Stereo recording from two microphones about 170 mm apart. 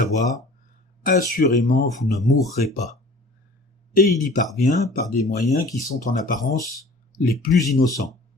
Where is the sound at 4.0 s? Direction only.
Centre (ahead or behind).